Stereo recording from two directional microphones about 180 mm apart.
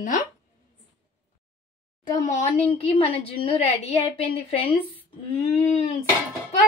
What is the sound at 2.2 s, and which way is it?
A woman's voice, 40° left (ahead or behind).